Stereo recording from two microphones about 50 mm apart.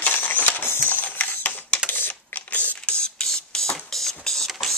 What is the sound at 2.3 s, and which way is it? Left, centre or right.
Mechanisms, left.